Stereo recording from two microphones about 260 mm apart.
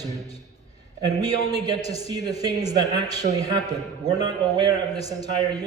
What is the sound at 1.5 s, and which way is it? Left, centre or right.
A man's voice, centre.